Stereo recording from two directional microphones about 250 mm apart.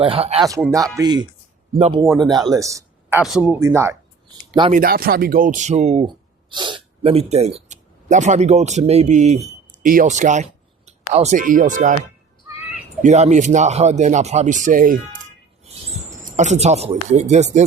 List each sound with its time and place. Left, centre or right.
0.0 s speech: right
2.5 s a sound: centre
3.2 s speech: centre
4.7 s speech: right
13.0 s speech: right